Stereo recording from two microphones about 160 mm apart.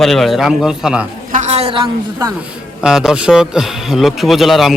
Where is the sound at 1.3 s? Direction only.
45° right (ahead or behind).